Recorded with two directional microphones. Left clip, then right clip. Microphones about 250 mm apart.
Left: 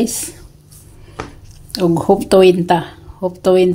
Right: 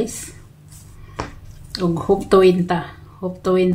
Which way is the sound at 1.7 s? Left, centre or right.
Left.